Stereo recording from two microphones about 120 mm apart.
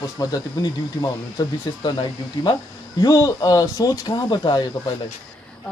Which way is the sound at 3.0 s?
30° left (ahead or behind).